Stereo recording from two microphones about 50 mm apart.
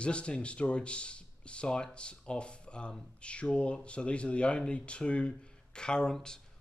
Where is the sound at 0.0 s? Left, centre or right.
Left.